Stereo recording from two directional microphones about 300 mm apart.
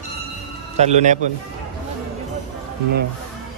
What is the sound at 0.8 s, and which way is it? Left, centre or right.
Speech, right.